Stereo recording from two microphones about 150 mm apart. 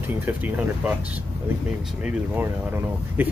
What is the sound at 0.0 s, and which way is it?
Speech, 10° right (ahead or behind).